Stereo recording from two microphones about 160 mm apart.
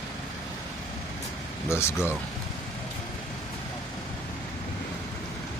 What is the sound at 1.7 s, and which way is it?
Speech, 15° left (ahead or behind).